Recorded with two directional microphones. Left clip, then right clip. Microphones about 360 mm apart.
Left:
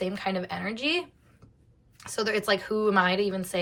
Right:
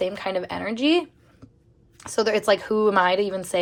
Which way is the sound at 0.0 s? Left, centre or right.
Centre.